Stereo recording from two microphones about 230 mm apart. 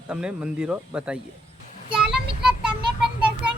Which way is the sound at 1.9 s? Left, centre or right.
Centre.